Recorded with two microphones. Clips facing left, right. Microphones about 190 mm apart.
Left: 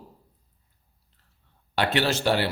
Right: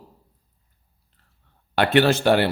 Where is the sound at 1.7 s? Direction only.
55° right (ahead or behind).